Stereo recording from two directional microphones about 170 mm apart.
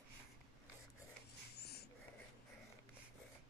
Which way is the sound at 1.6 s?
70° left (ahead or behind).